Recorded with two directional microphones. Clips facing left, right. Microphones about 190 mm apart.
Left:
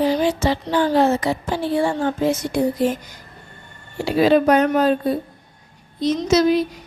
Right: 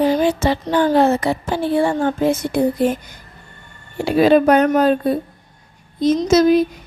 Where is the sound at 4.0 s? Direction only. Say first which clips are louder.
Right 3 dB; 55° right (ahead or behind).